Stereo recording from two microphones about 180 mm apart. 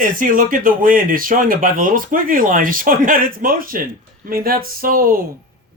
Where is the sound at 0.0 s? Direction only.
50° right (ahead or behind).